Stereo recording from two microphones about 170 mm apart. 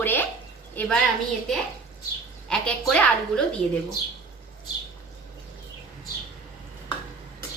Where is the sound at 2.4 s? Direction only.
5° left (ahead or behind).